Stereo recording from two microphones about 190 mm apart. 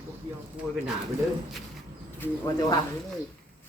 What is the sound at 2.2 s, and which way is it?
Speech, 20° left (ahead or behind).